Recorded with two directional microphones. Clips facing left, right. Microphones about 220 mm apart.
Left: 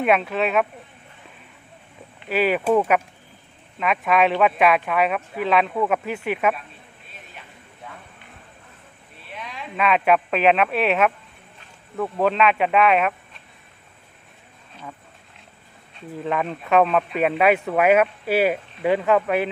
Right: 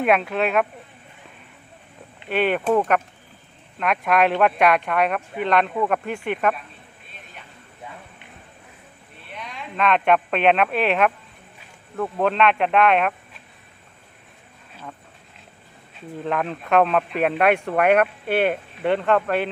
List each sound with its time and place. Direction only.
0.0 s a man's voice: centre (ahead or behind)
2.3 s a man's voice: 5° left (ahead or behind)
9.3 s a man's voice: centre (ahead or behind)
16.0 s a man's voice: centre (ahead or behind)